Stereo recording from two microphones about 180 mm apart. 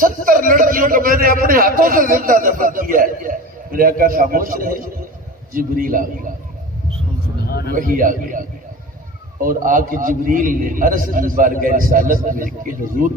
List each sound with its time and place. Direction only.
0.0 s a man's voice: 50° right (ahead or behind)
7.4 s a sound: 60° left (ahead or behind)
7.8 s a man's voice: 50° right (ahead or behind)